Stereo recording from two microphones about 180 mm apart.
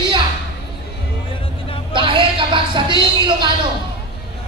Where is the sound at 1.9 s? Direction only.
25° right (ahead or behind).